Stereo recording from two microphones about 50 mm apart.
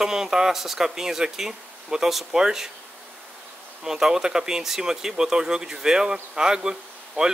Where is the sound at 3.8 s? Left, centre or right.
Centre.